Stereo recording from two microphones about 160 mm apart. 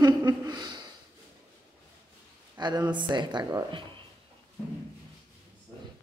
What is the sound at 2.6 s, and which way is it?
Speech, 25° right (ahead or behind).